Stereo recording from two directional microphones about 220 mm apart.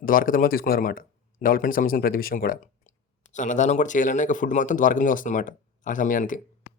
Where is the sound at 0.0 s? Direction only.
40° left (ahead or behind).